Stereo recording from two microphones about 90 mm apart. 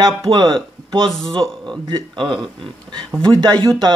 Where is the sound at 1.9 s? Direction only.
60° right (ahead or behind).